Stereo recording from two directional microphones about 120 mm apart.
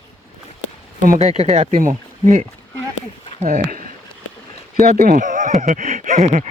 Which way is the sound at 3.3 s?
90° right.